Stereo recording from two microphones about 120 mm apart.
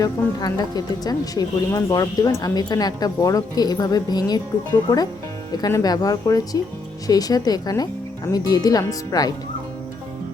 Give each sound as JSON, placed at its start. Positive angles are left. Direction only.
{"t": 0.0, "sound": "speech", "side_deg": 30}
{"t": 5.5, "sound": "speech", "side_deg": 30}